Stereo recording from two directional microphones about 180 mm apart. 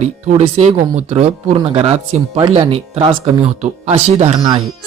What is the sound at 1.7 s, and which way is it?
Speech, 35° right (ahead or behind).